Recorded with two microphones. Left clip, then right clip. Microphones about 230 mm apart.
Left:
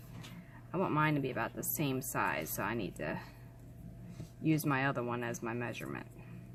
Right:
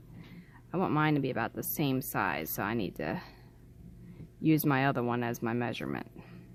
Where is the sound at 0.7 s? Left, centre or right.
Right.